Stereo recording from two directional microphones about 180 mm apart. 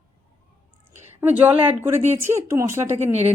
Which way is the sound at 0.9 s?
10° right (ahead or behind).